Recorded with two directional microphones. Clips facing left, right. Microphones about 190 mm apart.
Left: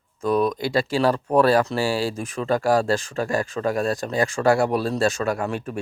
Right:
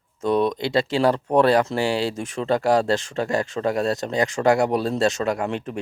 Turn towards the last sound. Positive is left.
turn(degrees=-20)  # may be behind; listen again after turning